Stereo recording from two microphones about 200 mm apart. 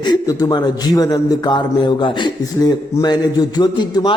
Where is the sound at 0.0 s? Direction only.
20° left (ahead or behind).